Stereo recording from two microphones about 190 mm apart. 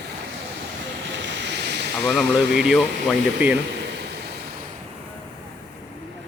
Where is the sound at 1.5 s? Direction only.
65° right (ahead or behind).